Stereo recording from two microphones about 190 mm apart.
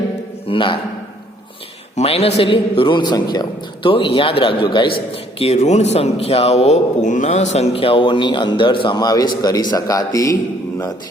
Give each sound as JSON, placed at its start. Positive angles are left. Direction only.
{"t": 0.4, "sound": "speech", "side_deg": 25}
{"t": 2.0, "sound": "a man's voice", "side_deg": 30}